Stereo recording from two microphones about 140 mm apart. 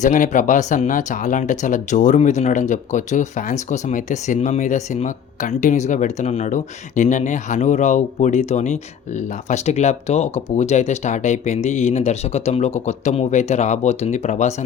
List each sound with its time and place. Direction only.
0.0 s speech: 65° left (ahead or behind)